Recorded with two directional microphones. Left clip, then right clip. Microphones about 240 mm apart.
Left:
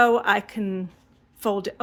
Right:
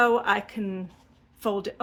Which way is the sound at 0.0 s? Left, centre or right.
Left.